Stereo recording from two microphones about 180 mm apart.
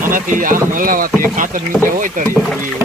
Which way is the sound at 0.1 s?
50° right (ahead or behind).